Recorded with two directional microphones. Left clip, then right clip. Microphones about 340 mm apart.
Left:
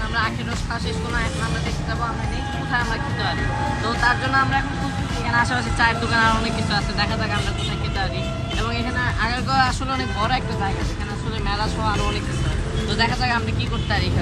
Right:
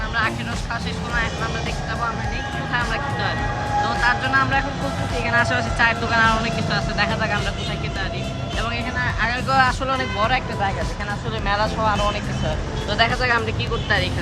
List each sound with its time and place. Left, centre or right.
3.8 s speech: centre
9.2 s speech: centre
11.4 s speech: centre